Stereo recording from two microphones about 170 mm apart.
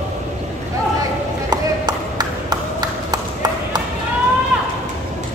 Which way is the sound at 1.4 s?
25° right (ahead or behind).